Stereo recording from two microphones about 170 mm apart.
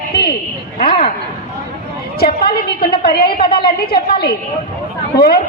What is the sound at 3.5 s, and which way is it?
Speech, 30° left (ahead or behind).